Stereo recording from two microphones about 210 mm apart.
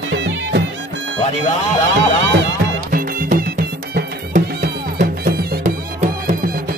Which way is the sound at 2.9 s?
40° right (ahead or behind).